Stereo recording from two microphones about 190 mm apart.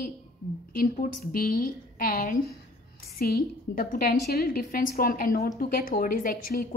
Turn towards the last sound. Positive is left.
turn(degrees=50)  # may be behind; listen again after turning